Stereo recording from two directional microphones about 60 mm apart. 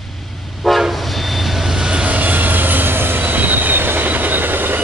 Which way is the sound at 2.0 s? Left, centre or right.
Right.